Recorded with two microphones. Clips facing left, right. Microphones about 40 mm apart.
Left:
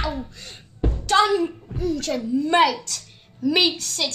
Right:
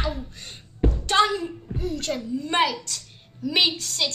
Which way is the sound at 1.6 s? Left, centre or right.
Right.